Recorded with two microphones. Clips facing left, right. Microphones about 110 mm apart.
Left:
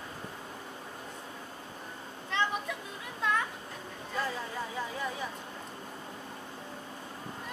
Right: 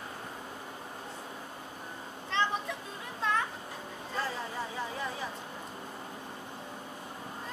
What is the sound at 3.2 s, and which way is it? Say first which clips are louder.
Children playing: even; 35° right (ahead or behind).